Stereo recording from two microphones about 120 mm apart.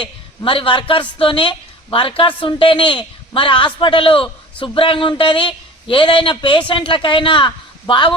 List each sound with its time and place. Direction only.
0.0 s a man's voice: 45° left (ahead or behind)